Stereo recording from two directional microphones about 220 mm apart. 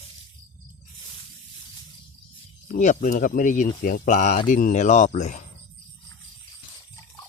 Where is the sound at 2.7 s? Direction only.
35° left (ahead or behind).